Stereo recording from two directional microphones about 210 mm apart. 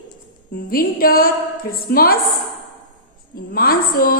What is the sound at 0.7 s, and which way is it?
A woman's voice, 45° left (ahead or behind).